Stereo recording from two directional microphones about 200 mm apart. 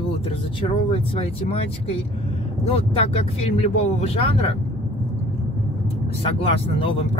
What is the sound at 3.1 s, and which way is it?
Speech, 30° left (ahead or behind).